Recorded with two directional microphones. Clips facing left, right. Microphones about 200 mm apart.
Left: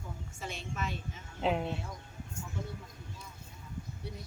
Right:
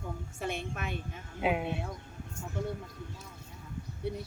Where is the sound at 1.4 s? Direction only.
10° right (ahead or behind).